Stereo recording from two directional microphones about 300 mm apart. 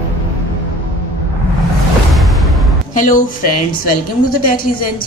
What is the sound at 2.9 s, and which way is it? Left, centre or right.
A woman's voice, left.